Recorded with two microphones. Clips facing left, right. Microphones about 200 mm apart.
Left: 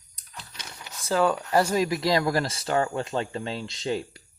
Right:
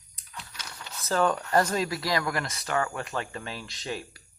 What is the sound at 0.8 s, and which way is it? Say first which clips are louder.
Speech: left 2 dB; 10° left (ahead or behind).